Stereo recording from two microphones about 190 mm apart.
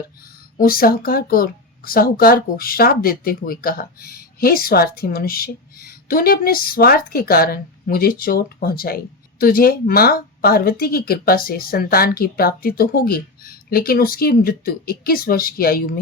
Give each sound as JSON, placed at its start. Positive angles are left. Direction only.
{"t": 0.6, "sound": "speech", "side_deg": 50}